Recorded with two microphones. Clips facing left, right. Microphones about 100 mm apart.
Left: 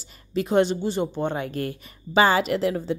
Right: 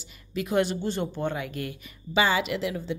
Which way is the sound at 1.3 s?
35° left (ahead or behind).